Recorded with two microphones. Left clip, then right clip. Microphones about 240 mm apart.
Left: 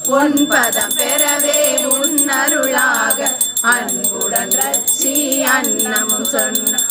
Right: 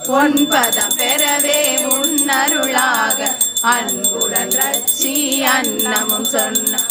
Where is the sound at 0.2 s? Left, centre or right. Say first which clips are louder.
Right 1 dB; centre.